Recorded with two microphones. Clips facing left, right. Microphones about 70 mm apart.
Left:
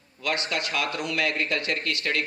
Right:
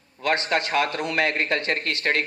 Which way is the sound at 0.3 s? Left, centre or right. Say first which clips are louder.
Right 5 dB; right.